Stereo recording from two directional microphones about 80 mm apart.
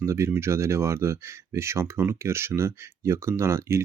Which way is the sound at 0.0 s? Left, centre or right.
Right.